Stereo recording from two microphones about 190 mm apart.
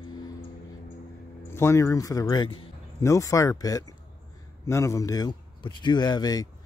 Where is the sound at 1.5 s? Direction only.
15° left (ahead or behind).